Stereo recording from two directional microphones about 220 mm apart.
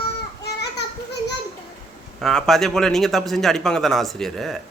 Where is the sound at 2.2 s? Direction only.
Centre (ahead or behind).